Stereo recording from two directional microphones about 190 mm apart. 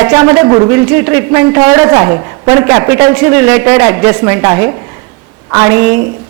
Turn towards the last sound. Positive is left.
turn(degrees=-10)  # may be behind; listen again after turning